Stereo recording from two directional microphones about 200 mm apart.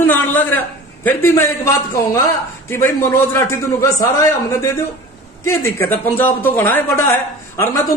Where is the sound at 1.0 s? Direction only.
10° left (ahead or behind).